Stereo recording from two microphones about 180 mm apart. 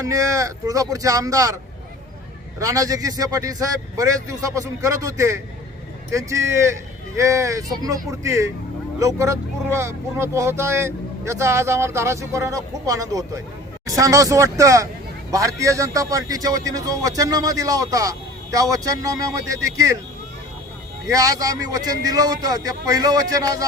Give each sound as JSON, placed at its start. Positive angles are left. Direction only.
{"t": 0.0, "sound": "a man's voice", "side_deg": -20}
{"t": 2.6, "sound": "a man's voice", "side_deg": -20}
{"t": 21.1, "sound": "a man's voice", "side_deg": -20}